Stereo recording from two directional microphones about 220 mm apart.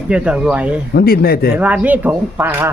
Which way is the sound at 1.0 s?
45° left (ahead or behind).